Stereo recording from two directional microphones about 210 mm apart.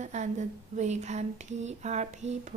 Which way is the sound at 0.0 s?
35° right (ahead or behind).